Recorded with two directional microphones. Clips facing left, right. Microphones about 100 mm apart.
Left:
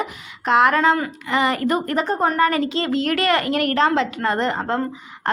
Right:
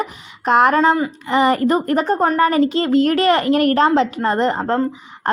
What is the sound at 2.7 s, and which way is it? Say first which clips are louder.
A woman's voice: right 6 dB; 40° right (ahead or behind).